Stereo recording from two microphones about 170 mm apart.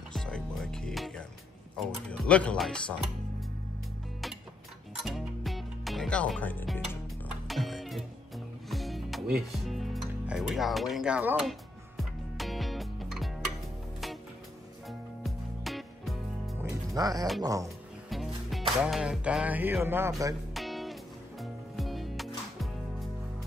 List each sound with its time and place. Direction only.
0.1 s music: 5° left (ahead or behind)
1.8 s speech: 5° left (ahead or behind)
5.0 s music: centre (ahead or behind)
14.9 s music: centre (ahead or behind)
16.6 s music: 20° right (ahead or behind)
17.4 s speech: 20° right (ahead or behind)
18.1 s music: centre (ahead or behind); by 20.3 s 20° right (ahead or behind)
20.5 s music: centre (ahead or behind)